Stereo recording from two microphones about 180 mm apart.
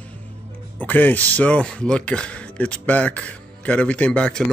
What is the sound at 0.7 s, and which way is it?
Speech, 10° left (ahead or behind).